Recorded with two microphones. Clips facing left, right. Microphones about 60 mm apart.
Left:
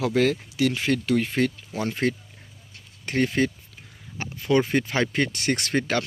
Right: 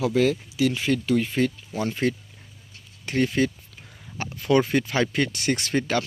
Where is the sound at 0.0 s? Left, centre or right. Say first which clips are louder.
Even; left.